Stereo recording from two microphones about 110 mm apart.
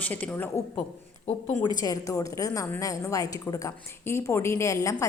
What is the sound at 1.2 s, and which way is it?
Speech, 85° left.